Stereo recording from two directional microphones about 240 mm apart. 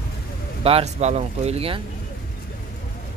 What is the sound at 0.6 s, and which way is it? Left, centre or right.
Speech, right.